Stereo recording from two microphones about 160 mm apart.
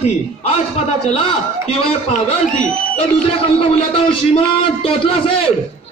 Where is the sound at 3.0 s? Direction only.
35° left (ahead or behind).